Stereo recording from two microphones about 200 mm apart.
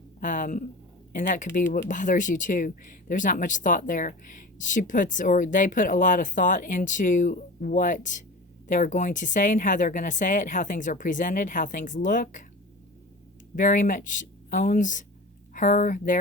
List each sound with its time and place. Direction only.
0.2 s speech: 40° left (ahead or behind)
13.6 s speech: 40° left (ahead or behind)